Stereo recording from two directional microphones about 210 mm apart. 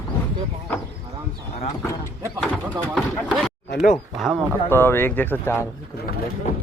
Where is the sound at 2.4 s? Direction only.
5° left (ahead or behind).